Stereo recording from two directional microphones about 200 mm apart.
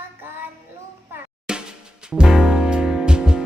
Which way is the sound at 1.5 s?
5° right (ahead or behind).